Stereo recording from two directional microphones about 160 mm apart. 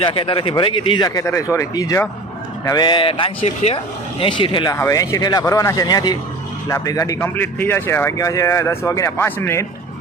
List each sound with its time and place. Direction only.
0.0 s speech: 35° left (ahead or behind)
4.7 s speech: 20° left (ahead or behind)